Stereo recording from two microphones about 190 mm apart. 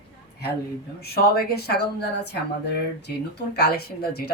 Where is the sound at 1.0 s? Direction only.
55° left (ahead or behind).